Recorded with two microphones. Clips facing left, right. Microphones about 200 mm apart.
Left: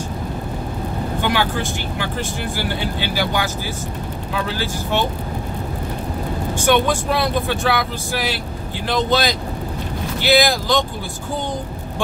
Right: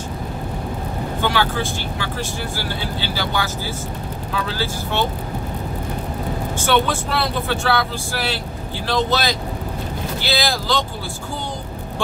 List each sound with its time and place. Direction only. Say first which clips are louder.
1.2 s speech: even; 15° left (ahead or behind)
6.6 s speech: left 2 dB; 15° left (ahead or behind)